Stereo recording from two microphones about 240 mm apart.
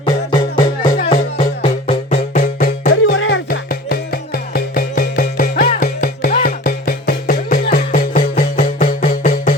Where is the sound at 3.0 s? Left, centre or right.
Left.